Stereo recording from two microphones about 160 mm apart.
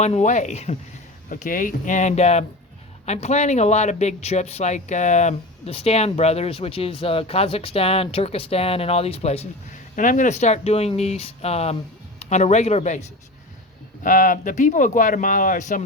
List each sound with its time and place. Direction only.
0.0 s speech: 45° left (ahead or behind)
1.3 s speech: 60° left (ahead or behind); by 9.5 s 40° left (ahead or behind)
9.9 s speech: 55° left (ahead or behind)